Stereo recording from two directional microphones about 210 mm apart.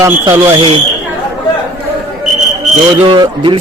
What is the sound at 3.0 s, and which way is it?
Speech, 25° right (ahead or behind).